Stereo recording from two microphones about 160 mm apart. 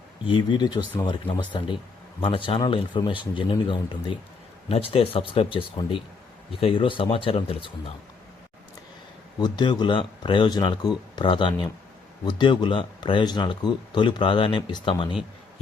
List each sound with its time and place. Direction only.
0.3 s speech: 30° left (ahead or behind)
9.4 s speech: 25° left (ahead or behind)